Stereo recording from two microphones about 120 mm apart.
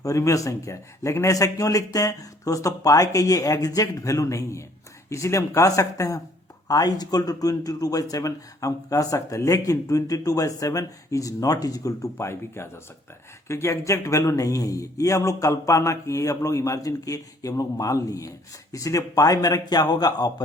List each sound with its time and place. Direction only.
0.0 s speech: 25° left (ahead or behind)